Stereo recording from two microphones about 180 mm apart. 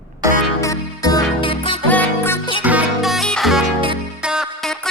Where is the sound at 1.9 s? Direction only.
10° left (ahead or behind).